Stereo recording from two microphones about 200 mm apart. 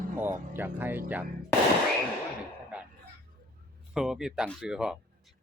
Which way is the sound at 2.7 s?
5° right (ahead or behind).